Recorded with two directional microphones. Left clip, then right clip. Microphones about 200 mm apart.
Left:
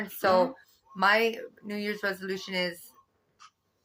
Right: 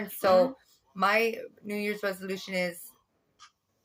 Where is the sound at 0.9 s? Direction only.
20° right (ahead or behind).